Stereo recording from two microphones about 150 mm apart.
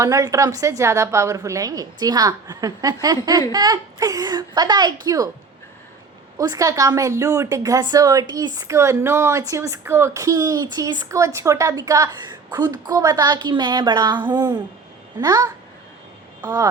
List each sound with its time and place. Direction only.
0.0 s a woman's voice: 20° right (ahead or behind)
6.3 s a woman's voice: 25° right (ahead or behind)